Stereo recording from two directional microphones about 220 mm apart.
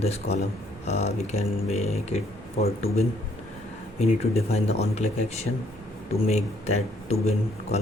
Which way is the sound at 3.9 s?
30° left (ahead or behind).